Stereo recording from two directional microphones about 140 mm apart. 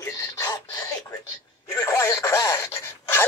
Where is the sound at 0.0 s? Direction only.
20° left (ahead or behind).